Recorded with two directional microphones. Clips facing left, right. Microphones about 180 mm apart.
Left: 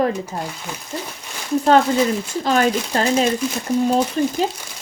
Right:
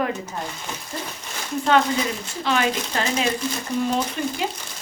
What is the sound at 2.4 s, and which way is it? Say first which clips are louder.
Speech: left 4 dB; 40° left (ahead or behind).